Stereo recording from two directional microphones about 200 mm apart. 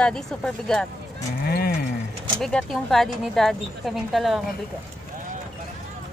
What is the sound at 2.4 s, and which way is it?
Speech, centre (ahead or behind).